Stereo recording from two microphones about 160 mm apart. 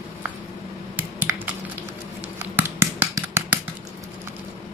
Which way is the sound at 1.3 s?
15° right (ahead or behind).